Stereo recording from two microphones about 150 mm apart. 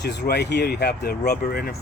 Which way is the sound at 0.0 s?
90° left.